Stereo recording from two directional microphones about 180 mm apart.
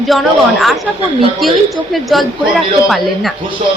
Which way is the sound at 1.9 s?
Centre (ahead or behind).